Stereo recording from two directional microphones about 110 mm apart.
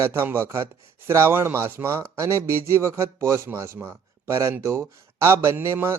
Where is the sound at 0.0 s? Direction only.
20° right (ahead or behind).